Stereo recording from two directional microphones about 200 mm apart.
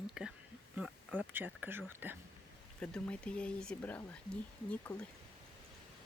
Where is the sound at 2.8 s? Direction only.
5° left (ahead or behind).